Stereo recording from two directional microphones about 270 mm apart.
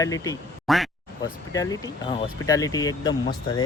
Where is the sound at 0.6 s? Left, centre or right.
Centre.